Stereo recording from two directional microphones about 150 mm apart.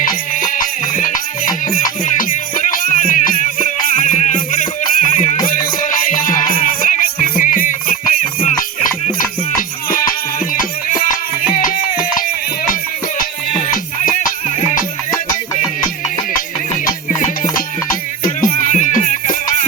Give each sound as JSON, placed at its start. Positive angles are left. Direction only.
{"t": 0.3, "sound": "music", "side_deg": 65}
{"t": 9.1, "sound": "music", "side_deg": 65}
{"t": 13.6, "sound": "music", "side_deg": 65}
{"t": 18.2, "sound": "music", "side_deg": 65}